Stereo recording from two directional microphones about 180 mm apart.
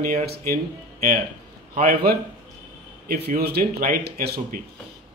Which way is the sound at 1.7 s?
55° right (ahead or behind).